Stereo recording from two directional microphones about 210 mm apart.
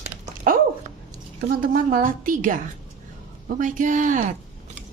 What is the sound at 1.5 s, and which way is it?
A woman's voice, 40° right (ahead or behind).